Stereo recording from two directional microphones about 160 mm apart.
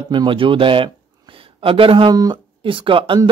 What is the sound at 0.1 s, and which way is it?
Speech, 30° right (ahead or behind).